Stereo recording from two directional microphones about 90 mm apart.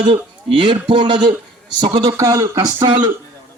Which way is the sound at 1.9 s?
45° right (ahead or behind).